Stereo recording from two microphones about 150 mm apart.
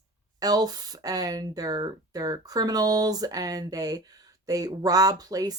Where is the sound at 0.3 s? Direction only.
25° right (ahead or behind).